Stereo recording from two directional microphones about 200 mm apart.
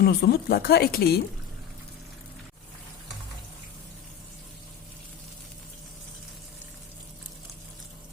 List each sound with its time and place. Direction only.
0.0 s speech: 50° left (ahead or behind)